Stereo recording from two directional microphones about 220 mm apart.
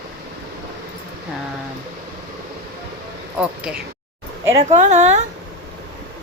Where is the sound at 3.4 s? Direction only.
5° right (ahead or behind).